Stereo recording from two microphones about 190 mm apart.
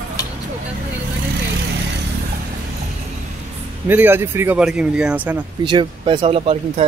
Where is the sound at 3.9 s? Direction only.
10° right (ahead or behind).